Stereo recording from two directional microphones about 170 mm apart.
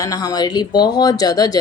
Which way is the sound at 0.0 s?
20° left (ahead or behind).